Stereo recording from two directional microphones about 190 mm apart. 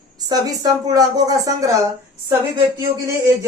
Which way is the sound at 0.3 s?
20° right (ahead or behind).